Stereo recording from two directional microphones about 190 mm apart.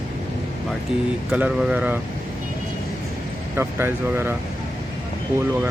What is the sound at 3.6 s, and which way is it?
Speech, 15° right (ahead or behind).